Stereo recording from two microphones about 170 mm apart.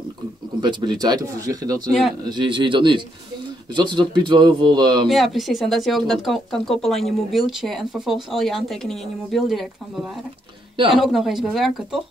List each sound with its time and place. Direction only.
0.6 s speech: 25° right (ahead or behind)
1.9 s speech: centre (ahead or behind)
2.2 s speech: 25° right (ahead or behind)
5.0 s speech: centre (ahead or behind)
11.0 s speech: centre (ahead or behind)